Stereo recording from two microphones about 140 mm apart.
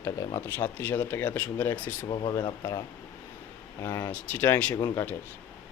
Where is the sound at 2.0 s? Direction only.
35° left (ahead or behind).